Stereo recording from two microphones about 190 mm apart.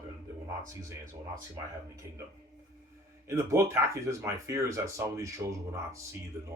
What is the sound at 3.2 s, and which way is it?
Speech, 15° right (ahead or behind).